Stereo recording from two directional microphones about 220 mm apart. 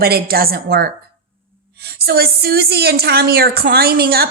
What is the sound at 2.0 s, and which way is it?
Female singing, 45° right (ahead or behind).